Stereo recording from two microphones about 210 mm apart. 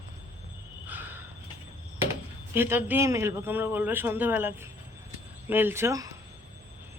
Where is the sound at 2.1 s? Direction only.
10° right (ahead or behind).